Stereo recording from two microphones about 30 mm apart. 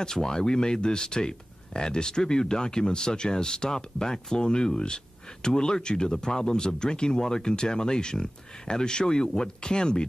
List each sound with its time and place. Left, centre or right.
0.0 s speech: left